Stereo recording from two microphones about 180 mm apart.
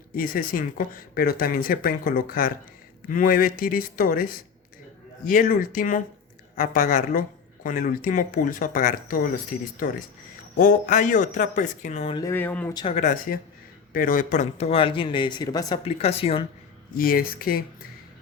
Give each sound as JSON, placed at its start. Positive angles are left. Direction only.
{"t": 0.2, "sound": "speech", "side_deg": 50}
{"t": 12.1, "sound": "speech", "side_deg": 15}
{"t": 12.8, "sound": "speech", "side_deg": 40}
{"t": 15.8, "sound": "speech", "side_deg": 35}
{"t": 16.9, "sound": "speech", "side_deg": 55}